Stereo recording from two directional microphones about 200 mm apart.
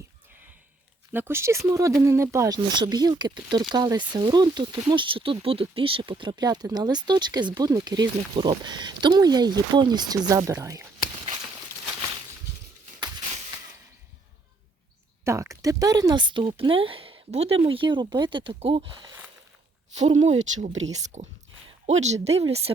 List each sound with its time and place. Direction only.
1.1 s speech: 10° right (ahead or behind)
13.0 s a sound: 25° right (ahead or behind)
15.2 s speech: 15° right (ahead or behind); by 22.7 s 30° right (ahead or behind)